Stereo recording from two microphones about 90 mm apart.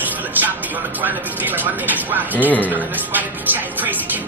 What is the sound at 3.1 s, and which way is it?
Speech, 20° right (ahead or behind).